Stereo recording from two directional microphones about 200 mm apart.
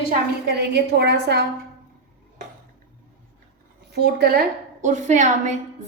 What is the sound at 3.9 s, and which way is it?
A woman's voice, 55° right (ahead or behind).